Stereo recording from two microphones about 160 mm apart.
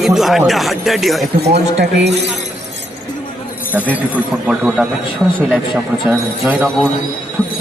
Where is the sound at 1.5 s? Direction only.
90° right.